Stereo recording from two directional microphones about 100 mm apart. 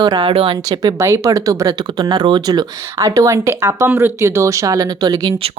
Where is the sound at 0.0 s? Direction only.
50° right (ahead or behind).